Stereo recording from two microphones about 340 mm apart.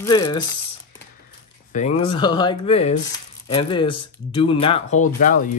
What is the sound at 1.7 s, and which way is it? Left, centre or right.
Speech, centre.